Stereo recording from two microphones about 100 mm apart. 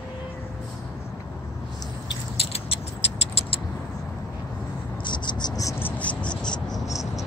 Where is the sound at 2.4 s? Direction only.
85° left.